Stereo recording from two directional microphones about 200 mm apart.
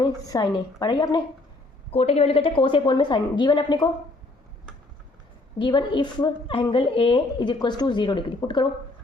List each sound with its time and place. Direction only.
0.0 s a woman's voice: 20° left (ahead or behind)
5.5 s a woman's voice: 25° left (ahead or behind)